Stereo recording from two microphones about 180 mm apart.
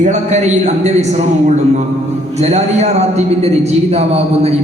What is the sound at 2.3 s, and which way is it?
A man's voice, 35° right (ahead or behind).